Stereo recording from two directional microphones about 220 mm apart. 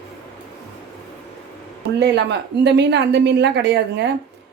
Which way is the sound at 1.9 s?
50° right (ahead or behind).